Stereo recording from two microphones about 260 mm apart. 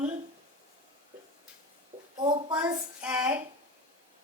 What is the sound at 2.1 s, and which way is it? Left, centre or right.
Speech, centre.